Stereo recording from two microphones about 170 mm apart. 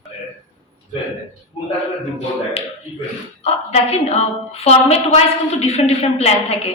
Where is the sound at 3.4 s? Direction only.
35° left (ahead or behind).